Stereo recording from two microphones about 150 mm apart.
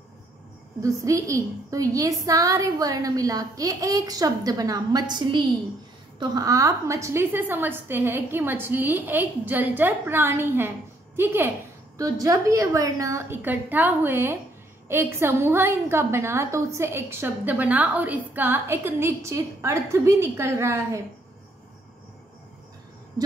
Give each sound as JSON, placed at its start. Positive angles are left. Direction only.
{"t": 0.8, "sound": "a woman's voice", "side_deg": -20}